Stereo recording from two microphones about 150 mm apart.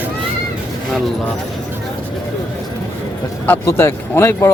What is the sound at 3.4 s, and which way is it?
Speech, 15° left (ahead or behind).